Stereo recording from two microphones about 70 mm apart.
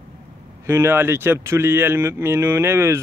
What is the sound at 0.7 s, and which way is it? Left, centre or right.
Speech, right.